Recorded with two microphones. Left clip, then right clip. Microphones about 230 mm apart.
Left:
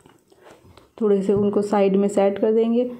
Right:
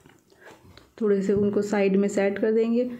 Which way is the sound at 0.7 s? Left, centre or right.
Centre.